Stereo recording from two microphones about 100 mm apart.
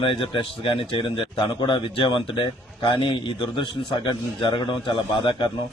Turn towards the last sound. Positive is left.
turn(degrees=55)  # may be behind; listen again after turning